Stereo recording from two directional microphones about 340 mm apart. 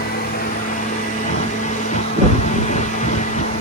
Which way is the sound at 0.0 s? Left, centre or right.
Left.